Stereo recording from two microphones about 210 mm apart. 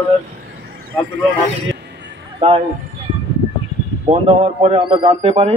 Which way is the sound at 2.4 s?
25° right (ahead or behind).